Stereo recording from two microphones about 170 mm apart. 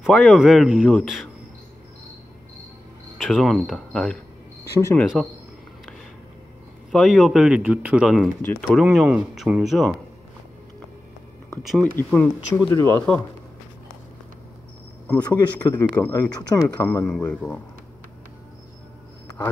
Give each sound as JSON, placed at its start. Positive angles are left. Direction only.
{"t": 0.0, "sound": "speech", "side_deg": 0}
{"t": 3.2, "sound": "speech", "side_deg": 0}
{"t": 6.9, "sound": "speech", "side_deg": 0}
{"t": 8.4, "sound": "speech", "side_deg": 10}
{"t": 8.7, "sound": "speech", "side_deg": -5}
{"t": 12.0, "sound": "speech", "side_deg": 10}
{"t": 15.0, "sound": "speech", "side_deg": 10}
{"t": 17.0, "sound": "speech", "side_deg": 5}